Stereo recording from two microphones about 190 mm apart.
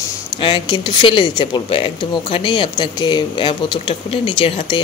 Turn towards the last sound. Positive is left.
turn(degrees=25)  # may be behind; listen again after turning